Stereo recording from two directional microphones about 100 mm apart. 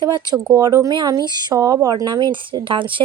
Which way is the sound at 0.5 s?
35° right (ahead or behind).